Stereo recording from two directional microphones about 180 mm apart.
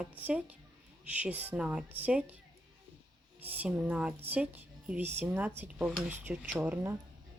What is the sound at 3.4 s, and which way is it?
A woman's voice, 10° right (ahead or behind).